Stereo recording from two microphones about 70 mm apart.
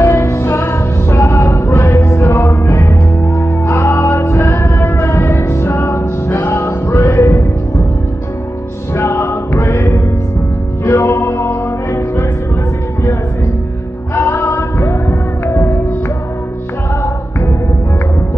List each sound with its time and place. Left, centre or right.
0.0 s music: left
8.9 s music: left
14.1 s music: left